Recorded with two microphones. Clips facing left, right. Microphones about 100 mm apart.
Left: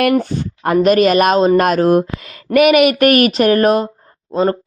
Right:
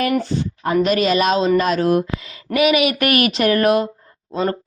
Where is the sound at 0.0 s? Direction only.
55° left (ahead or behind).